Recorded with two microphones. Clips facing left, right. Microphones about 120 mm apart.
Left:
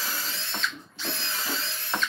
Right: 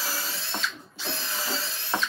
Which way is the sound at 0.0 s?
5° right (ahead or behind).